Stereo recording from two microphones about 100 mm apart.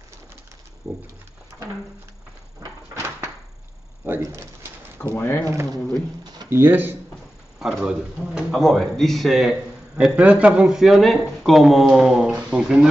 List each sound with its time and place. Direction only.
0.8 s a sound: 30° right (ahead or behind)
4.0 s speech: 25° right (ahead or behind)
4.9 s speech: 20° left (ahead or behind)
6.5 s speech: 20° right (ahead or behind)
7.5 s speech: 5° right (ahead or behind)